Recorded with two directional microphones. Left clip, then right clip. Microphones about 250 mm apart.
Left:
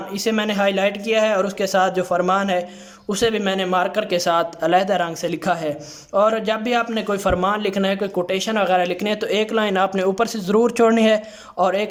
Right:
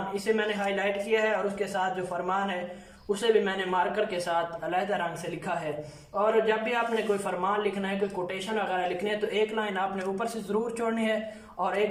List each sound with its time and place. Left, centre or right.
0.3 s a man's voice: left
6.2 s a man's voice: left